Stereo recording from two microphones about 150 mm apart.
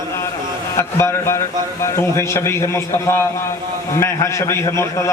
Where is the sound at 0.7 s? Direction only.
20° left (ahead or behind).